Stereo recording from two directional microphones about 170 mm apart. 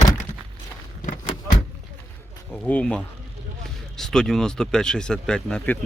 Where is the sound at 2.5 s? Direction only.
10° left (ahead or behind).